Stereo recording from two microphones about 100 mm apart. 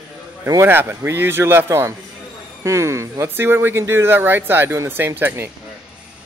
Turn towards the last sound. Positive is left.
turn(degrees=-20)  # may be behind; listen again after turning